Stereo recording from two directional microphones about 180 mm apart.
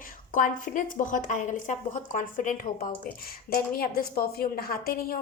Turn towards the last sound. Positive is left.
turn(degrees=55)  # may be behind; listen again after turning